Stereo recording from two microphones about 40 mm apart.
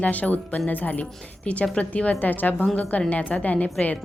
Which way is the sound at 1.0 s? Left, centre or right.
Left.